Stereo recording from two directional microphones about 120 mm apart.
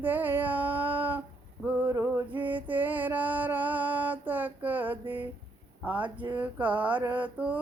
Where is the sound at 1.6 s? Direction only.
15° right (ahead or behind).